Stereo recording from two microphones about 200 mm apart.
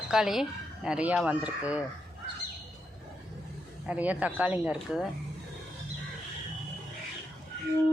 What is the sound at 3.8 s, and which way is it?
Speech, 5° right (ahead or behind).